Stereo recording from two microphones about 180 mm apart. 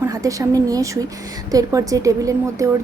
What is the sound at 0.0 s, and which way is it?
A woman's voice, 20° right (ahead or behind).